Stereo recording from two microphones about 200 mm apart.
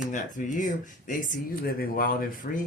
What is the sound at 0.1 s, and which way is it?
Speech, 40° left (ahead or behind).